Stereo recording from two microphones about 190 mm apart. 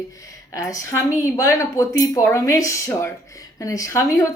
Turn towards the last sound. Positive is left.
turn(degrees=15)  # may be behind; listen again after turning